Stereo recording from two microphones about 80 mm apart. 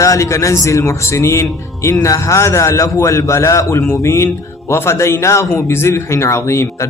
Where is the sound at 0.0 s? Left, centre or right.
Left.